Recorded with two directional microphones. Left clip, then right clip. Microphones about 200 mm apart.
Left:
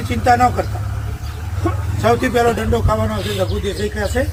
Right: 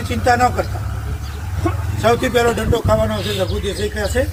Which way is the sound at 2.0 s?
10° left (ahead or behind).